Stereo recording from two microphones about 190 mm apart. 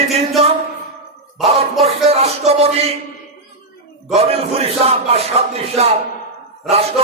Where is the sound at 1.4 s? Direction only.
35° right (ahead or behind).